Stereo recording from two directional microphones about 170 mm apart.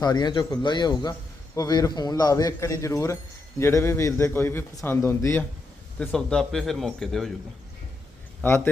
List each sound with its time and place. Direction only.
0.0 s a man's voice: 25° left (ahead or behind)
6.0 s speech: 5° left (ahead or behind)
8.4 s a man's voice: 10° left (ahead or behind)